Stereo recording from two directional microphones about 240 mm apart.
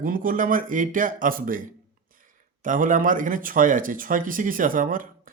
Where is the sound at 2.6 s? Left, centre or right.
Right.